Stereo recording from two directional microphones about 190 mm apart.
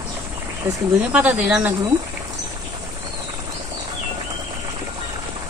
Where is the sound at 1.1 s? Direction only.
5° right (ahead or behind).